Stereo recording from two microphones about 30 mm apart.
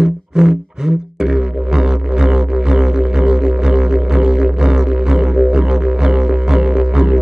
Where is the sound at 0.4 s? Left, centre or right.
Centre.